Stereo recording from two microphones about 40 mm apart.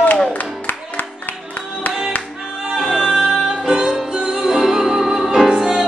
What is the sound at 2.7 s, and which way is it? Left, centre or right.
Music, centre.